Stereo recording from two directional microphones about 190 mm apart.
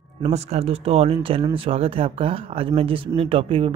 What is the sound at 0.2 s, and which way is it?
Speech, 35° right (ahead or behind).